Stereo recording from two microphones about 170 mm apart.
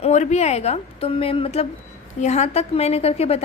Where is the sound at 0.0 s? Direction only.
40° left (ahead or behind).